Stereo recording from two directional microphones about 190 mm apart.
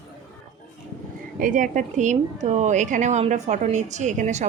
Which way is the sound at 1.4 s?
45° right (ahead or behind).